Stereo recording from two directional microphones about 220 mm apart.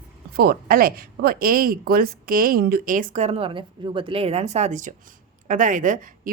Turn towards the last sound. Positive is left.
turn(degrees=-35)  # may be behind; listen again after turning